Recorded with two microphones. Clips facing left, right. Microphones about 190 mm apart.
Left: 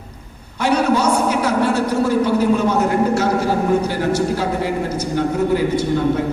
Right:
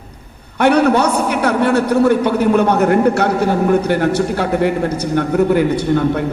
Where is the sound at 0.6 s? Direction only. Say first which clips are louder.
Right 4 dB; 60° right (ahead or behind).